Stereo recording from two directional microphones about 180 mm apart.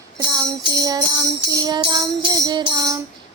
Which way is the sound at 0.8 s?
20° right (ahead or behind).